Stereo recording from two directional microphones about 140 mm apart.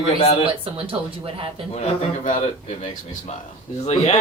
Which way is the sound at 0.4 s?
40° right (ahead or behind).